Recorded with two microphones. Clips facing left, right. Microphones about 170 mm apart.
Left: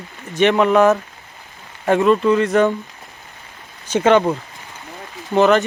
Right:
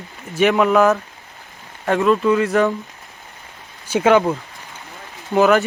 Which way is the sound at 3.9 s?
5° right (ahead or behind).